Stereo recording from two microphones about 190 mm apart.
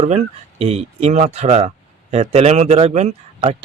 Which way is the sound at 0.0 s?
35° right (ahead or behind).